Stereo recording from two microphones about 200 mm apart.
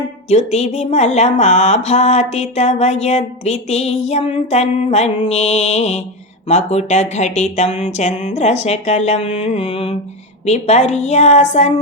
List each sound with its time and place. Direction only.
0.3 s mantra: 35° left (ahead or behind)